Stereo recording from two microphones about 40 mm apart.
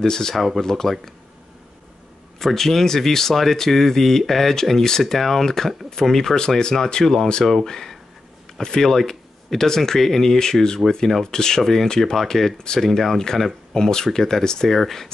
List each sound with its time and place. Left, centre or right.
0.0 s speech: centre
0.4 s speech: centre
2.3 s speech: centre
11.1 s speech: centre
11.3 s speech: centre
12.6 s speech: centre